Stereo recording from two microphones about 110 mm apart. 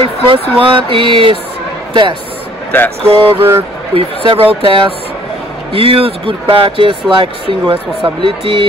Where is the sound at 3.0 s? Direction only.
60° right (ahead or behind).